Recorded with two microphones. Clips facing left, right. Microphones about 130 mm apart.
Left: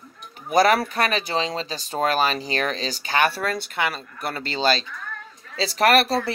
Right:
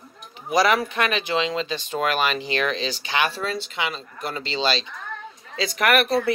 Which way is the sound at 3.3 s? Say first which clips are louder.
Left 2 dB; 60° left (ahead or behind).